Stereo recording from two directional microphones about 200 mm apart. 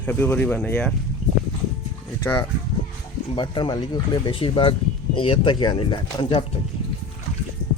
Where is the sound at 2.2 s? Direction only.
15° left (ahead or behind).